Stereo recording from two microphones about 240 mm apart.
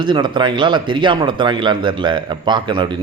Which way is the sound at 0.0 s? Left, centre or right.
Centre.